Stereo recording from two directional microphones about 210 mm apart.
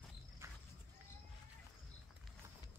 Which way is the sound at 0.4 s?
15° right (ahead or behind).